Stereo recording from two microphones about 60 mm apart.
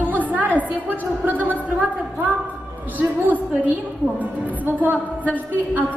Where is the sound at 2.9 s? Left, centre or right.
Right.